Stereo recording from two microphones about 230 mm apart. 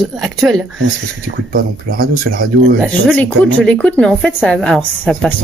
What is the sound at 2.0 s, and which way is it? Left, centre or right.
Speech, right.